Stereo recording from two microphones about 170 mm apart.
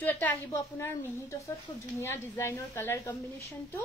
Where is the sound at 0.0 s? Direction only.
15° left (ahead or behind).